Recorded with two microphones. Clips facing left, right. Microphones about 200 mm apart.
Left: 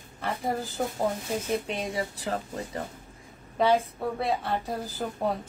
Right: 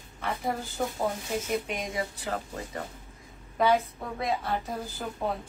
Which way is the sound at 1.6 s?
35° left (ahead or behind).